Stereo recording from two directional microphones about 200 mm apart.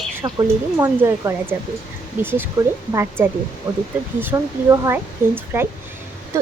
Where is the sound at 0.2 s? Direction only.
15° right (ahead or behind).